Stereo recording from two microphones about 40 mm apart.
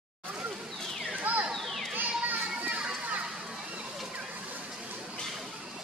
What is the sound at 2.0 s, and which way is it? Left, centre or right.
Children playing, right.